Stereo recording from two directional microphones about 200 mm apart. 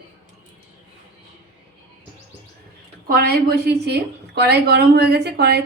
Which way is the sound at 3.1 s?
50° right (ahead or behind).